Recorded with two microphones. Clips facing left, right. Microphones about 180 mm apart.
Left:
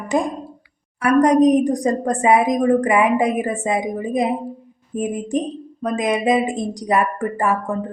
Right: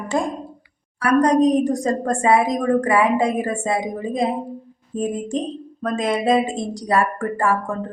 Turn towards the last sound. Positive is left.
turn(degrees=15)  # may be behind; listen again after turning